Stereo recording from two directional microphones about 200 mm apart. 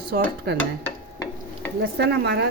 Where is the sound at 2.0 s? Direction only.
60° right (ahead or behind).